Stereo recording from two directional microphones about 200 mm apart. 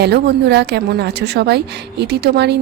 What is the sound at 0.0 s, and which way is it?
A woman's voice, 55° right (ahead or behind).